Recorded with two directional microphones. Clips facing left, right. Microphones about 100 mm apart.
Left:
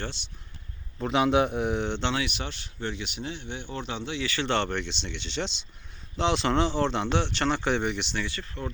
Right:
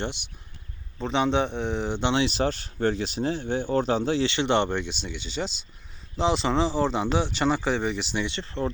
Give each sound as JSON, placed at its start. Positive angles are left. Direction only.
{"t": 0.9, "sound": "speech", "side_deg": 5}
{"t": 1.9, "sound": "speech", "side_deg": -10}
{"t": 2.1, "sound": "speech", "side_deg": -30}
{"t": 4.3, "sound": "speech", "side_deg": -20}
{"t": 8.1, "sound": "speech", "side_deg": -20}